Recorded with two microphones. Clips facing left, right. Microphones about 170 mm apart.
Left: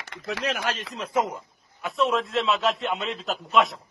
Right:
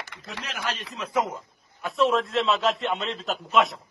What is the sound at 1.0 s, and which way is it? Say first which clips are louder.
Speech: even; 25° left (ahead or behind).